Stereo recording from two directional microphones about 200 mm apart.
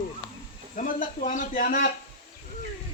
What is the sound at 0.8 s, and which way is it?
A man's voice, 40° left (ahead or behind).